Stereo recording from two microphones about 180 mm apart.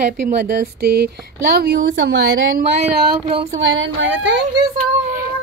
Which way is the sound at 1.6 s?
65° right (ahead or behind).